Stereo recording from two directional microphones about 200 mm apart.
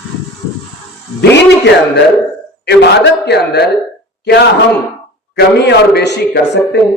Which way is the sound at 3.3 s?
55° left (ahead or behind).